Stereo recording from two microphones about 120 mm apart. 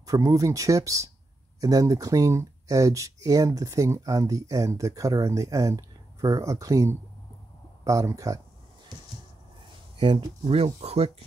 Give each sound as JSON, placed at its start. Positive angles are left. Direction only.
{"t": 0.0, "sound": "speech", "side_deg": -30}
{"t": 9.9, "sound": "speech", "side_deg": -45}
{"t": 10.4, "sound": "speech", "side_deg": -60}